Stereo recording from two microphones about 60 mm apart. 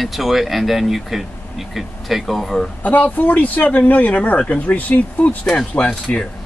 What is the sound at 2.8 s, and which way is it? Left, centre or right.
Speech, left.